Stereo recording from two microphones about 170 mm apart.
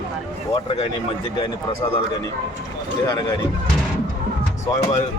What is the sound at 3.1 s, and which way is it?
Speech, 20° left (ahead or behind).